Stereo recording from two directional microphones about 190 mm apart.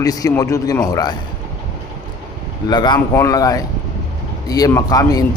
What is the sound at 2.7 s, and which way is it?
A man's voice, 20° left (ahead or behind).